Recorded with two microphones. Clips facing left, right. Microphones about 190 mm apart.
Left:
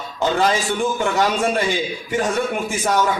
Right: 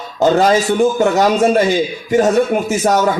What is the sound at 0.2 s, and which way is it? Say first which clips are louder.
A man's voice: right 7 dB; 40° right (ahead or behind).